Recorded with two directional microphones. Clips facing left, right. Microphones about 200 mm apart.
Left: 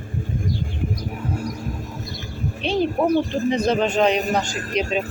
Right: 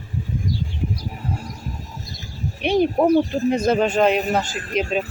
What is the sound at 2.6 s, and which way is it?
A man's voice, 15° right (ahead or behind).